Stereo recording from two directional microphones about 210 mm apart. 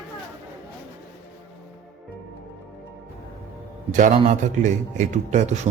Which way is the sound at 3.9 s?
35° right (ahead or behind).